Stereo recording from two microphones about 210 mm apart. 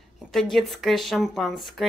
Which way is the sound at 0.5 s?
Centre (ahead or behind).